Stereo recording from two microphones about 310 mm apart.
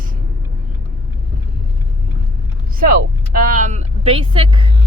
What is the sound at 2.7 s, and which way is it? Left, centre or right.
Speech, right.